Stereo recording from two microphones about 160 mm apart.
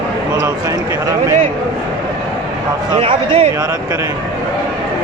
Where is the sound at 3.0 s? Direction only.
35° right (ahead or behind).